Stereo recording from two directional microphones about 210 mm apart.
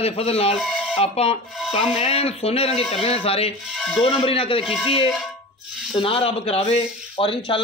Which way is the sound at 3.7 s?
Centre (ahead or behind).